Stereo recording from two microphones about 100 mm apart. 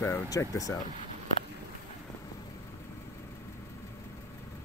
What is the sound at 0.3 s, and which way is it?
Speech, 35° left (ahead or behind).